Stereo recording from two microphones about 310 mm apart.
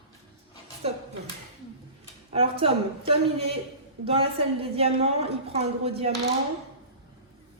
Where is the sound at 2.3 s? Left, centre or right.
Centre.